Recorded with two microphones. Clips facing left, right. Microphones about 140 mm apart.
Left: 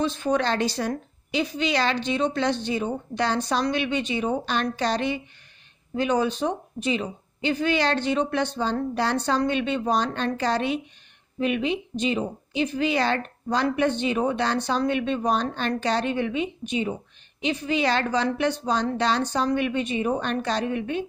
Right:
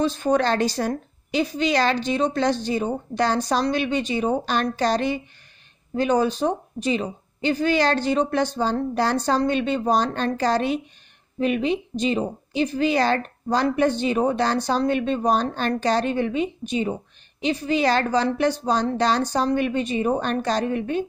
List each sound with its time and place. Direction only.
0.0 s a woman's voice: 40° right (ahead or behind)